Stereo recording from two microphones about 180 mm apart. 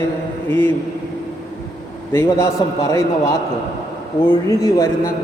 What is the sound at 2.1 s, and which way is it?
A man's voice, 15° left (ahead or behind).